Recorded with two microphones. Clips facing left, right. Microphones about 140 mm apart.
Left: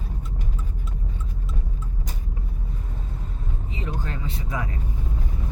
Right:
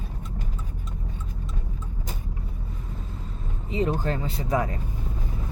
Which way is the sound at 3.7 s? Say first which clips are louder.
Right 9 dB; 35° right (ahead or behind).